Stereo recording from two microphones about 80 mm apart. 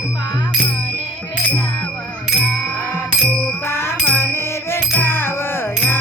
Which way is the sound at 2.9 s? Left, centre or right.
Left.